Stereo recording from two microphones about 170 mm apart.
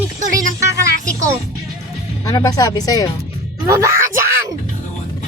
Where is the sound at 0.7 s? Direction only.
70° left (ahead or behind).